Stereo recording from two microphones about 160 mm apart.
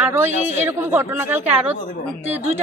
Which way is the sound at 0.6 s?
15° right (ahead or behind).